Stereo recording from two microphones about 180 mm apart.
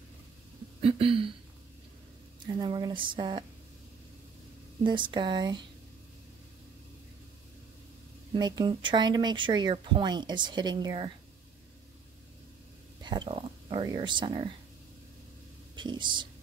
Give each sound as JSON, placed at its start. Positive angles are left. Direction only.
{"t": 0.7, "sound": "a sound", "side_deg": -30}
{"t": 2.4, "sound": "speech", "side_deg": -25}
{"t": 4.8, "sound": "speech", "side_deg": -25}
{"t": 8.3, "sound": "speech", "side_deg": -25}
{"t": 13.0, "sound": "speech", "side_deg": -25}
{"t": 15.7, "sound": "speech", "side_deg": -25}